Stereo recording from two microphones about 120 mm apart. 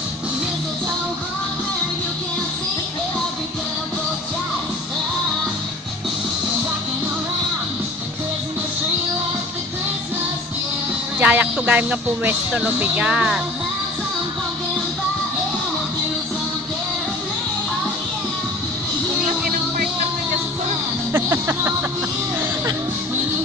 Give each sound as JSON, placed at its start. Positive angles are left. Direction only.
{"t": 11.1, "sound": "speech", "side_deg": -15}
{"t": 21.1, "sound": "music", "side_deg": -20}